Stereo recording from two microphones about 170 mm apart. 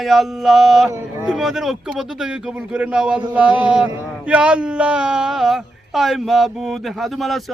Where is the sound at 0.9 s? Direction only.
20° right (ahead or behind).